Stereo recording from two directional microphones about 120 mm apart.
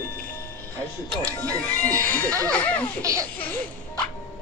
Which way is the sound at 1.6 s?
10° left (ahead or behind).